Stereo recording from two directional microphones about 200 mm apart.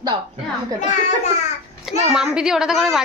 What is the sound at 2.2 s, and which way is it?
Speech, 5° right (ahead or behind).